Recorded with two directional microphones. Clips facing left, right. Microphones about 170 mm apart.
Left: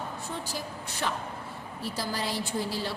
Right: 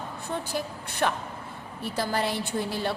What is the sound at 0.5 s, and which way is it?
A woman's voice, 60° right (ahead or behind).